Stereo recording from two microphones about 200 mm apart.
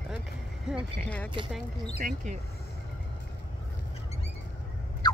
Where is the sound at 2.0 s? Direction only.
40° right (ahead or behind).